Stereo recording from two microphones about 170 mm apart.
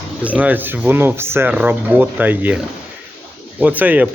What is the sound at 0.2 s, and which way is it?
Speech, 10° right (ahead or behind).